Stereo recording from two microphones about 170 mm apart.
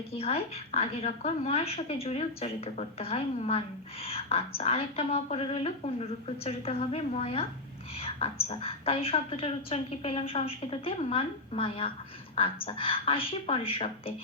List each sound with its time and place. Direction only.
0.1 s a woman's voice: 35° left (ahead or behind)